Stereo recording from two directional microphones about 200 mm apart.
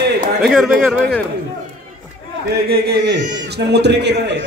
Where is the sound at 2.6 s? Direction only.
50° right (ahead or behind).